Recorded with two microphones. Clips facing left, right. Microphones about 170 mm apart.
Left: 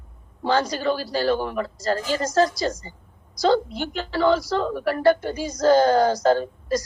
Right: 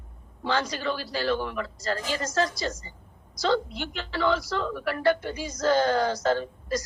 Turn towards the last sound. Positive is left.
turn(degrees=40)  # may be behind; listen again after turning